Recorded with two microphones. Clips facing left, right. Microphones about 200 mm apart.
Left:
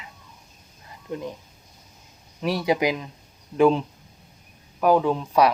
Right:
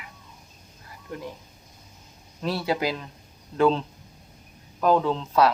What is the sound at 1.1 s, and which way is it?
Speech, 20° left (ahead or behind).